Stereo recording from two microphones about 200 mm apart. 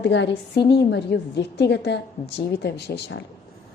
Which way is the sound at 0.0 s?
60° left (ahead or behind).